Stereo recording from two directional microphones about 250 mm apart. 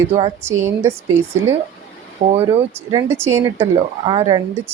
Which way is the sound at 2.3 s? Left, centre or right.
Right.